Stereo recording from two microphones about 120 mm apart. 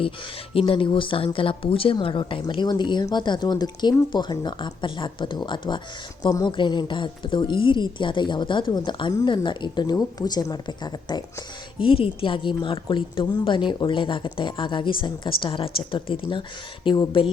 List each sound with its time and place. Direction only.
0.5 s a woman's voice: 45° left (ahead or behind)
11.8 s a woman's voice: 50° left (ahead or behind)